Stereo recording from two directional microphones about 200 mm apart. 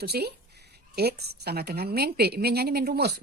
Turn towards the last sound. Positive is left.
turn(degrees=-50)  # may be behind; listen again after turning